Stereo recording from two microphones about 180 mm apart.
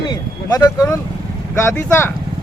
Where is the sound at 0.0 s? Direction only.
25° left (ahead or behind).